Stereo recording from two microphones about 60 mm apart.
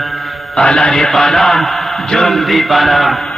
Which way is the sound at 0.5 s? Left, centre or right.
Centre.